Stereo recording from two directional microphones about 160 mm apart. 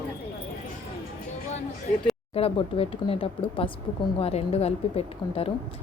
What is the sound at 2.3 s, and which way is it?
A woman's voice, 35° left (ahead or behind).